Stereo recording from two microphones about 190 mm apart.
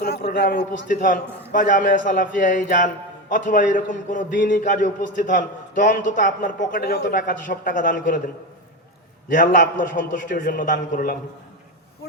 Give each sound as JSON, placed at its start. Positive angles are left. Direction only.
{"t": 0.0, "sound": "a sound", "side_deg": 55}
{"t": 0.9, "sound": "a man's voice", "side_deg": 45}
{"t": 9.3, "sound": "a man's voice", "side_deg": 45}